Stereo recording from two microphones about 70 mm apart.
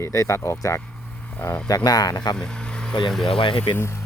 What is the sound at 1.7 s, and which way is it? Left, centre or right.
Speech, left.